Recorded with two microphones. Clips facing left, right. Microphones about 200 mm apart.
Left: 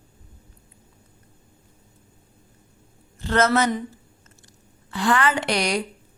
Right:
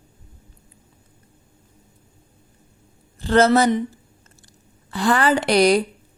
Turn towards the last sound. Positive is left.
turn(degrees=-35)  # may be behind; listen again after turning